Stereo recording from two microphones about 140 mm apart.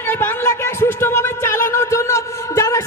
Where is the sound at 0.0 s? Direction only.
15° left (ahead or behind).